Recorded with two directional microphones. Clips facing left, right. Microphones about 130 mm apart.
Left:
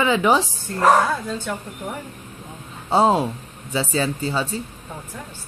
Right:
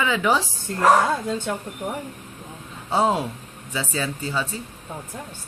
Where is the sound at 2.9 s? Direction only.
30° left (ahead or behind).